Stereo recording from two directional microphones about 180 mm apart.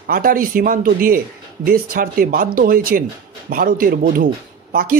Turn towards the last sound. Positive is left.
turn(degrees=-50)  # may be behind; listen again after turning